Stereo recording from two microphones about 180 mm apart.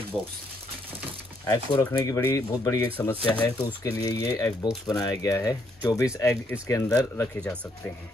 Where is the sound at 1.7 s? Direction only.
20° left (ahead or behind).